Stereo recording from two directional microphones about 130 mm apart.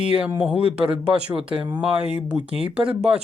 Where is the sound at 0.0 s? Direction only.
10° right (ahead or behind).